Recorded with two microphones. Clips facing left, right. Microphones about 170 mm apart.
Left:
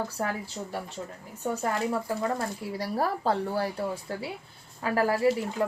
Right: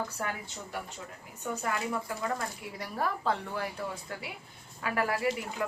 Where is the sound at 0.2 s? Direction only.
30° left (ahead or behind).